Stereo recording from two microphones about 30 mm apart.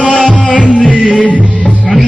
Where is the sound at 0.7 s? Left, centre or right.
Left.